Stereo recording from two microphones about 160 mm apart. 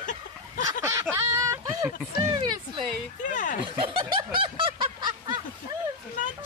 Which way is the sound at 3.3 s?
55° left (ahead or behind).